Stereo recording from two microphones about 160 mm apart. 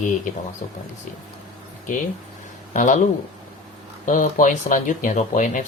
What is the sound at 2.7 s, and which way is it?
Speech, 50° left (ahead or behind).